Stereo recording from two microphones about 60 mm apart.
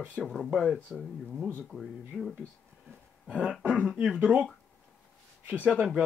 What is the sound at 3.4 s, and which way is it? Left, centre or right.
Speech, centre.